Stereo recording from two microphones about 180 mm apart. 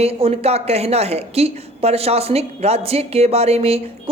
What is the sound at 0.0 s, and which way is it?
A woman's voice, 35° right (ahead or behind).